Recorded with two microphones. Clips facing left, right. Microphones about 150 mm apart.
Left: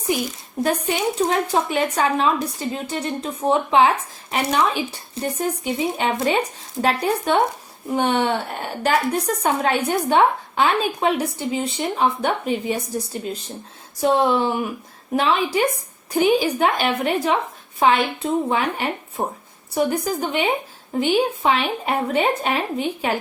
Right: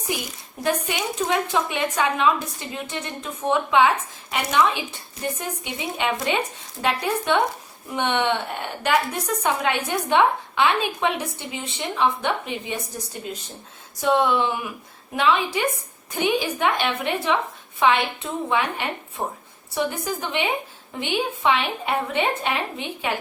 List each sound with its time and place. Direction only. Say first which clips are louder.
0.6 s speech: left 4 dB; 35° left (ahead or behind)
14.0 s speech: left 2 dB; 35° left (ahead or behind)